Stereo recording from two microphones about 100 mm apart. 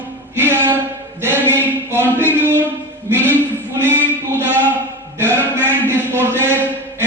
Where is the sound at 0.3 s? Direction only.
25° right (ahead or behind).